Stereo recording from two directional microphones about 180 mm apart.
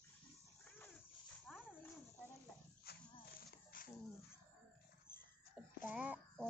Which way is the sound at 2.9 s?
60° left (ahead or behind).